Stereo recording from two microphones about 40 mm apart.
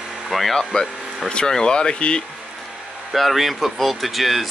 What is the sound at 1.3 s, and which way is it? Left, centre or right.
Speech, centre.